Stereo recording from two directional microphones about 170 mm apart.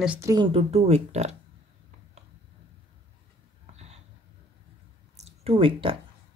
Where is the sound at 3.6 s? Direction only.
40° right (ahead or behind).